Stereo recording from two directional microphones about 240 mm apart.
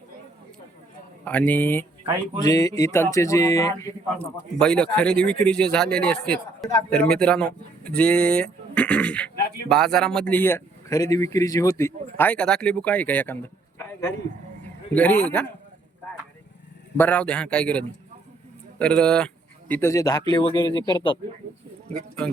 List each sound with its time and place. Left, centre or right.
1.2 s speech: centre
17.0 s speech: centre